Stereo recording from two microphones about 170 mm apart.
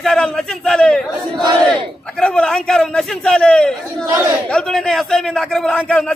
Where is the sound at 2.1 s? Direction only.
5° left (ahead or behind).